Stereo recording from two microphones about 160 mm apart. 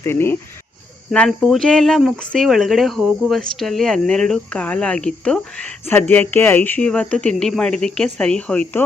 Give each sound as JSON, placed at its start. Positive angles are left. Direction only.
{"t": 0.0, "sound": "speech", "side_deg": 15}
{"t": 1.1, "sound": "speech", "side_deg": 5}